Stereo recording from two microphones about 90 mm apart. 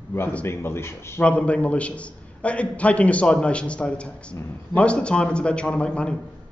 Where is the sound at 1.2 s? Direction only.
15° left (ahead or behind).